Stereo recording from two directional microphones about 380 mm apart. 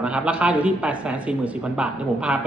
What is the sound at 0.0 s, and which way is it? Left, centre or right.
A man's voice, centre.